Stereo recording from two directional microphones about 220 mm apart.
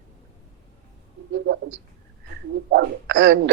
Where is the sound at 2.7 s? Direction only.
50° right (ahead or behind).